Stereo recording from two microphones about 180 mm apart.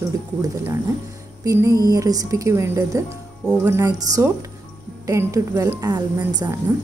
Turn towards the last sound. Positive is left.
turn(degrees=-20)  # may be behind; listen again after turning